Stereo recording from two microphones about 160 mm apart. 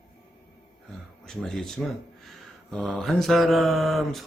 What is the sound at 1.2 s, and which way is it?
Mantra, 5° left (ahead or behind).